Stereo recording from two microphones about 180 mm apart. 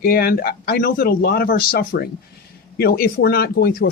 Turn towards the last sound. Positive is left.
turn(degrees=60)  # may be behind; listen again after turning